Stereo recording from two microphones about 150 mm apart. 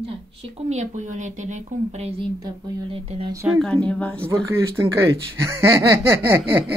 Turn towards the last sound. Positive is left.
turn(degrees=-15)  # may be behind; listen again after turning